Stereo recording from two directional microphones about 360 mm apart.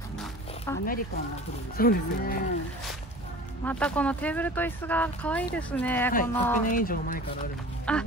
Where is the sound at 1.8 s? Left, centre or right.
Left.